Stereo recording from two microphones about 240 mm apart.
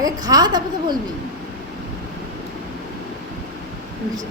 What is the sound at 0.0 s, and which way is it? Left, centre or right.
Speech, centre.